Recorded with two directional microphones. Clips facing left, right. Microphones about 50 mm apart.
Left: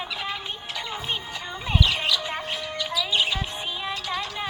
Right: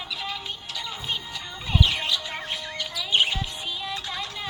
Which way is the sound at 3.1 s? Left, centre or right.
Right.